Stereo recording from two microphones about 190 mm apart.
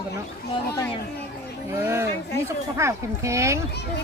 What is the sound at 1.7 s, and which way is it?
Speech, 15° right (ahead or behind).